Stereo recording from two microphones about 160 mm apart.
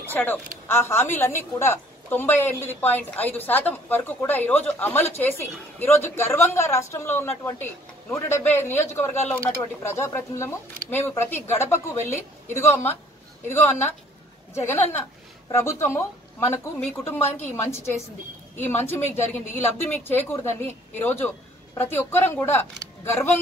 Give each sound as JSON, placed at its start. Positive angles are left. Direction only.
{"t": 0.0, "sound": "a woman's voice", "side_deg": 10}